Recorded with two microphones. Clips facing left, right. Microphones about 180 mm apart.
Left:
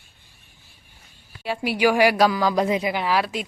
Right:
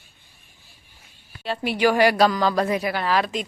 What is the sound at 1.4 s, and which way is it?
Speech, 10° left (ahead or behind).